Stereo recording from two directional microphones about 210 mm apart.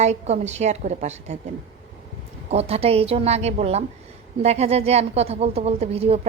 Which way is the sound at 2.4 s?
30° right (ahead or behind).